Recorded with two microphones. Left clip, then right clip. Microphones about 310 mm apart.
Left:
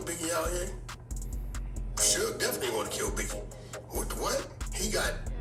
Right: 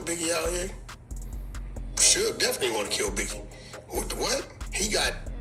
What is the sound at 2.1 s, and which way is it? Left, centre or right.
Speech, centre.